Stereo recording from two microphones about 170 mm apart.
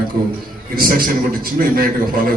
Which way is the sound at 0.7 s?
55° right (ahead or behind).